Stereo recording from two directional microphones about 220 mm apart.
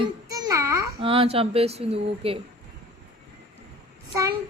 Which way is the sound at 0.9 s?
25° right (ahead or behind).